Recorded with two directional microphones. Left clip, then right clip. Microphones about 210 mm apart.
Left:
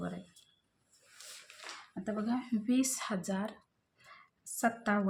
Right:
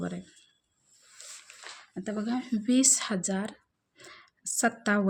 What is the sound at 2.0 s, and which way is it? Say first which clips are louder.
Speech: right 3 dB; 45° right (ahead or behind).